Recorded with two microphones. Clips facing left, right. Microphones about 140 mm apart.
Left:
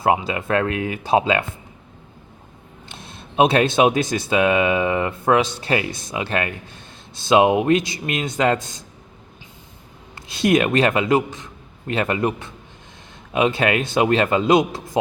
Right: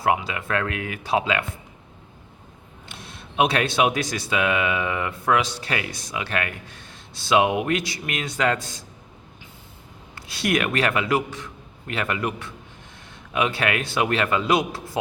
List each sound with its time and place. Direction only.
0.0 s a man's voice: 25° left (ahead or behind)
2.9 s a man's voice: 25° left (ahead or behind)
10.2 s a man's voice: 20° left (ahead or behind)